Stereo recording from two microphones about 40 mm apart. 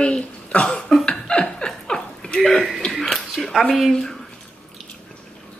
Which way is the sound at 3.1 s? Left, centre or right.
Centre.